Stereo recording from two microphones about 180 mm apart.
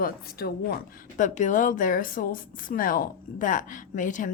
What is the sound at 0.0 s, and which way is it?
Speech, 55° left (ahead or behind).